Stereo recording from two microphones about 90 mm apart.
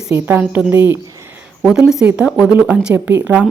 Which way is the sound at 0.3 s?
20° right (ahead or behind).